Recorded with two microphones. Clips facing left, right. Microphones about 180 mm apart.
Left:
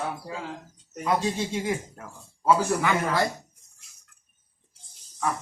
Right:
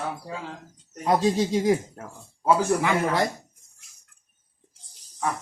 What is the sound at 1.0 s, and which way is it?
Speech, 35° right (ahead or behind).